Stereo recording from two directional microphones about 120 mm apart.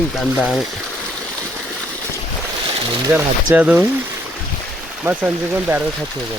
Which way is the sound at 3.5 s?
10° right (ahead or behind).